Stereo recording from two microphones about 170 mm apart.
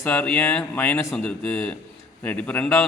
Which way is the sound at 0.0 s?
10° left (ahead or behind).